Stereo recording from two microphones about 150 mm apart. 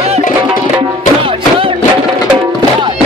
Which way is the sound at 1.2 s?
35° right (ahead or behind).